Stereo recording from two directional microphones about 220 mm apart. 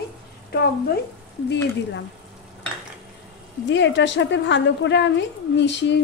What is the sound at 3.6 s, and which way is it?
A woman's voice, 55° left (ahead or behind).